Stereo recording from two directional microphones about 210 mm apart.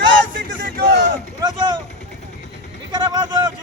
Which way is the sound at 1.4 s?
20° right (ahead or behind).